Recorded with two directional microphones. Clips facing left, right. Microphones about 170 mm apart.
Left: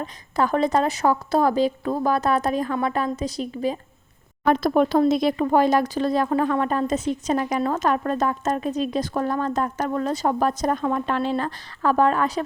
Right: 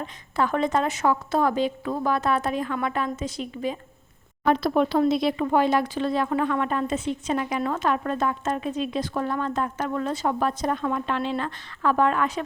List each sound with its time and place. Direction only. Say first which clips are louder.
0.0 s speech: left 2 dB; 40° left (ahead or behind)